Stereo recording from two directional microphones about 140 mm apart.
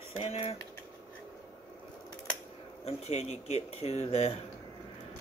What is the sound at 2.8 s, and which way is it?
Speech, 50° left (ahead or behind).